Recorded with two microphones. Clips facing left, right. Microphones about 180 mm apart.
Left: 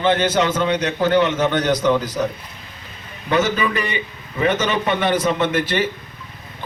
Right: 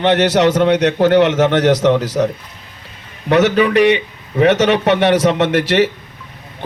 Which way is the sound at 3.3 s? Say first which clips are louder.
Right 7 dB; 75° right (ahead or behind).